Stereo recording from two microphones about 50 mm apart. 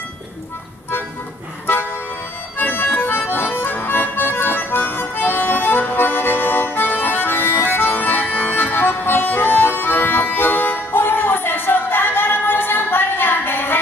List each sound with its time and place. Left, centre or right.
2.5 s accordion: left